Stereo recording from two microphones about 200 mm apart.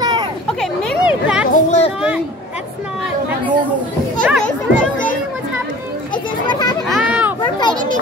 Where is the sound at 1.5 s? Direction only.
35° left (ahead or behind).